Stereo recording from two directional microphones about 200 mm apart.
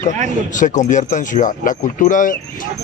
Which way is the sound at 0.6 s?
40° left (ahead or behind).